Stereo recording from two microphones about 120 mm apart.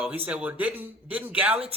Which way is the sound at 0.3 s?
10° right (ahead or behind).